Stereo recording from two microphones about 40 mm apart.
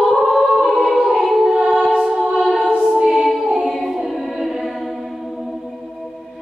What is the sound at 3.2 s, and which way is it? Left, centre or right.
Choir, centre.